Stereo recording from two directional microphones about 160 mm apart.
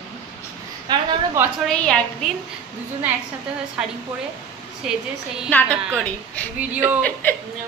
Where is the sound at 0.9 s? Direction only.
25° right (ahead or behind).